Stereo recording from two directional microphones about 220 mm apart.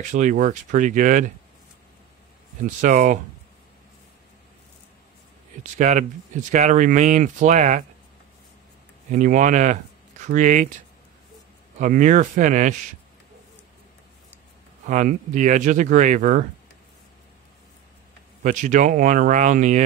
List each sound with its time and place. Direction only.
0.0 s speech: 35° right (ahead or behind)
2.6 s speech: 35° right (ahead or behind)
5.6 s speech: 35° right (ahead or behind)
9.1 s speech: 35° right (ahead or behind)
11.8 s speech: 35° right (ahead or behind)
14.9 s speech: 35° right (ahead or behind)
18.4 s speech: 35° right (ahead or behind)